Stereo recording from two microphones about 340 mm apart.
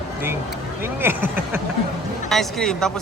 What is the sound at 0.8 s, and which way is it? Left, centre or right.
Speech, centre.